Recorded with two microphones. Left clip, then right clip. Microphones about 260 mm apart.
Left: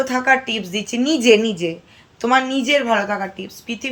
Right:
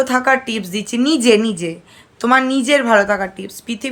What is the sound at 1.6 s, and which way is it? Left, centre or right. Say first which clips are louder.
Speech: left 1 dB; right.